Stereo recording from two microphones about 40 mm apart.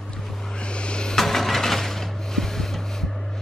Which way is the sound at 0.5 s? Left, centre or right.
Left.